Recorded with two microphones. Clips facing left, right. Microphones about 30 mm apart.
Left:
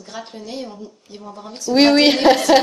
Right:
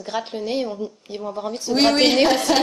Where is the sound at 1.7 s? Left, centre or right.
Centre.